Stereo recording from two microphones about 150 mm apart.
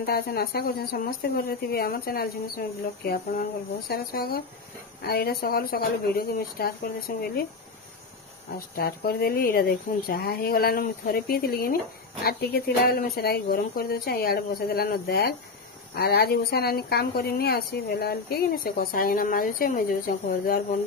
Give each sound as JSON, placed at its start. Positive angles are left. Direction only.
{"t": 0.0, "sound": "a woman's voice", "side_deg": 90}
{"t": 8.5, "sound": "a woman's voice", "side_deg": 90}